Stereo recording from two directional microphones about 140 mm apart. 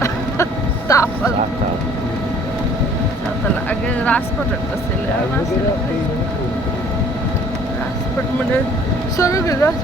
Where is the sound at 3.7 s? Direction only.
10° left (ahead or behind).